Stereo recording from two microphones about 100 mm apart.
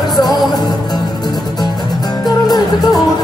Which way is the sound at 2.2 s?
40° left (ahead or behind).